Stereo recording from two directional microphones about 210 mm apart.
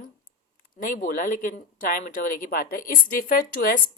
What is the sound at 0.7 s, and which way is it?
Speech, 40° left (ahead or behind).